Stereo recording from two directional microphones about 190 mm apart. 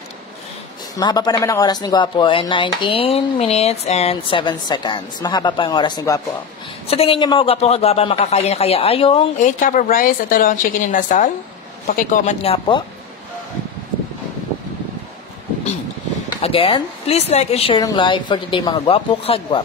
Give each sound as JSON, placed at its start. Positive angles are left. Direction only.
{"t": 0.9, "sound": "speech", "side_deg": 20}
{"t": 6.9, "sound": "a man's voice", "side_deg": 30}
{"t": 9.4, "sound": "a woman's voice", "side_deg": 45}
{"t": 12.4, "sound": "speech", "side_deg": 25}
{"t": 16.3, "sound": "a man's voice", "side_deg": 30}